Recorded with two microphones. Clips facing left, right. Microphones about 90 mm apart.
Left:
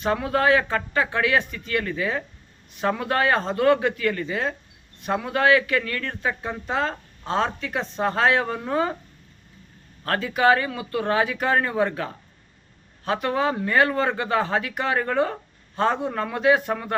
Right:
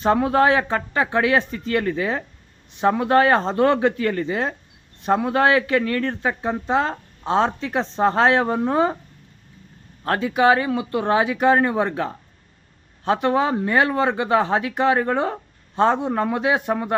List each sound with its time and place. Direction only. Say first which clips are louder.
0.0 s speech: right 5 dB; 30° right (ahead or behind)
10.0 s speech: right 3 dB; 20° right (ahead or behind)